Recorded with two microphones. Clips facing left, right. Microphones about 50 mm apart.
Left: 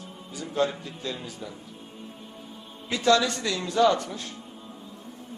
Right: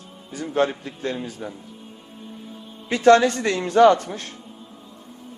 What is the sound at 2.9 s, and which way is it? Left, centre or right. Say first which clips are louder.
A man's voice: right 7 dB; right.